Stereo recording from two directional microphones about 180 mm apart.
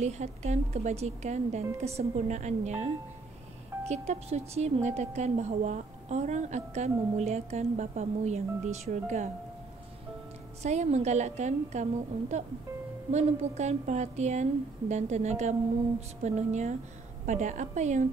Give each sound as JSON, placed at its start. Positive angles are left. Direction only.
{"t": 0.0, "sound": "a woman's voice", "side_deg": -40}
{"t": 3.9, "sound": "a woman's voice", "side_deg": -35}
{"t": 10.6, "sound": "a woman's voice", "side_deg": -40}